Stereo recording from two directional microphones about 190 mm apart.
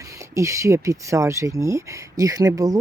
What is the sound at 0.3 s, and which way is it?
Speech, 15° right (ahead or behind).